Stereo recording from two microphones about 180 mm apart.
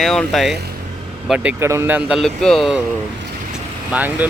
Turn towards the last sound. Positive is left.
turn(degrees=-10)  # may be behind; listen again after turning